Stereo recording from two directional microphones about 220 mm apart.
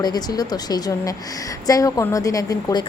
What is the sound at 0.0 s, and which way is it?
A woman's voice, 15° left (ahead or behind).